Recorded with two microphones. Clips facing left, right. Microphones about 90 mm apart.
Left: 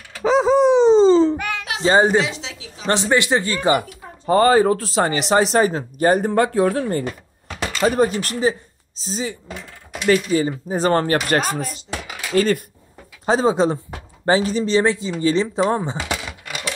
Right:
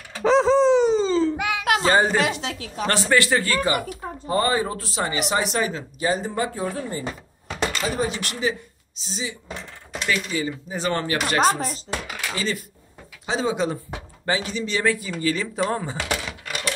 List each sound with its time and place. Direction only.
0.2 s a sound: 5° left (ahead or behind); by 1.3 s 30° left (ahead or behind)
1.3 s a sound: 10° right (ahead or behind)
1.9 s speech: 20° left (ahead or behind)
2.1 s speech: 55° right (ahead or behind)
2.9 s speech: 20° left (ahead or behind)
4.3 s speech: 90° left
4.9 s speech: 45° left (ahead or behind); by 7.1 s 65° left (ahead or behind)
7.4 s door: centre (ahead or behind)
7.8 s speech: 50° left (ahead or behind)
11.4 s chopping: 40° right (ahead or behind)
12.4 s speech: 55° left (ahead or behind)
13.2 s speech: 40° left (ahead or behind); by 16.0 s 25° left (ahead or behind)
16.0 s coin: 10° left (ahead or behind)